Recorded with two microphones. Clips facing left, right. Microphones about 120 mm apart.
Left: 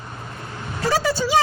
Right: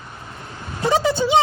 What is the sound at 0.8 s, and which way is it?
Vehicle, 20° right (ahead or behind).